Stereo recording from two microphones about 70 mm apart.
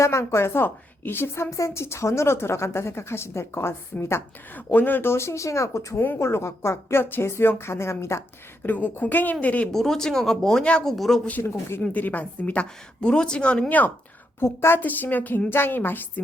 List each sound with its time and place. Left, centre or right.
0.0 s a woman's voice: left
1.5 s a woman's voice: left
4.5 s a woman's voice: left
8.6 s a woman's voice: left
9.7 s speech: centre
10.8 s speech: centre
11.4 s a woman's voice: left
14.3 s a woman's voice: left
14.8 s a woman's voice: left